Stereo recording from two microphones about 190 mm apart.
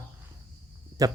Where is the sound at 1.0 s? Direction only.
20° right (ahead or behind).